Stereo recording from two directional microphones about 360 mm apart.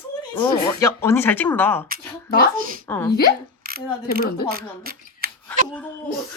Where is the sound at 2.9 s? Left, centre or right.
Centre.